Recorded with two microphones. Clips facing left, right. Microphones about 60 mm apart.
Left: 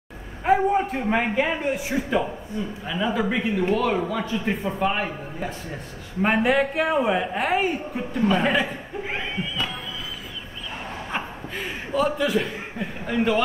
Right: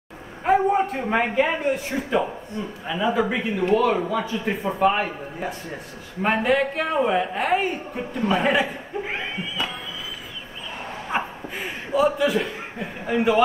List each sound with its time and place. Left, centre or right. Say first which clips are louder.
0.4 s a man's voice: right 1 dB; centre
11.1 s chuckle: right 6 dB; centre